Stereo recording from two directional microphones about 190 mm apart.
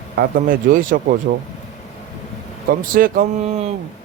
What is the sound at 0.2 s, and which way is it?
A man's voice, 45° right (ahead or behind).